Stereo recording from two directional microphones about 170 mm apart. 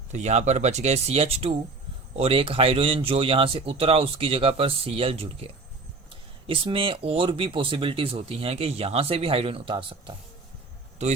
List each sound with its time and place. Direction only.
0.1 s speech: 40° right (ahead or behind)
6.5 s speech: 30° right (ahead or behind)
11.0 s speech: 40° right (ahead or behind)